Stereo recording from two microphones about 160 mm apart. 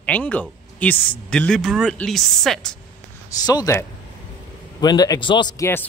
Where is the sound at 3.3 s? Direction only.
25° left (ahead or behind).